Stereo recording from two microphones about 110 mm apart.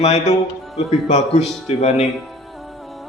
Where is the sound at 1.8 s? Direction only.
75° left (ahead or behind).